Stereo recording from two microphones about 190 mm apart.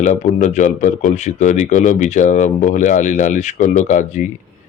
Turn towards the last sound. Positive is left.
turn(degrees=40)  # may be behind; listen again after turning